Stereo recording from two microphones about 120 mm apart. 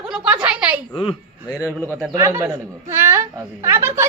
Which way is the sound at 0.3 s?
10° right (ahead or behind).